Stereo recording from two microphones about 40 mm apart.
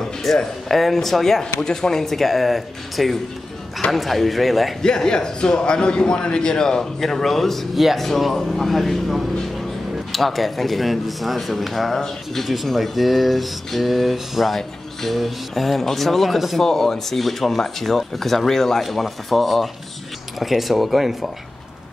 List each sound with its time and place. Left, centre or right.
0.3 s speech: centre
1.4 s speech: centre
4.8 s a man's voice: centre
16.6 s speech: centre